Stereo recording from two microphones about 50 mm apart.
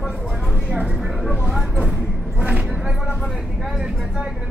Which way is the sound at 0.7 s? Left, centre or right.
Centre.